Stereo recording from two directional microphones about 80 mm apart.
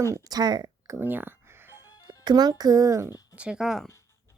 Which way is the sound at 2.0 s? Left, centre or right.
Right.